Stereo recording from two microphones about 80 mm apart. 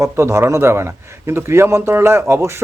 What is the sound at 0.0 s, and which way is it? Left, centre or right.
A man's voice, right.